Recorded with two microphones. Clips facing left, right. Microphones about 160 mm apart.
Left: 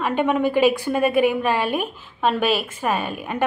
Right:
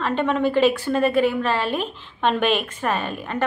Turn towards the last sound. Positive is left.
turn(degrees=10)  # may be behind; listen again after turning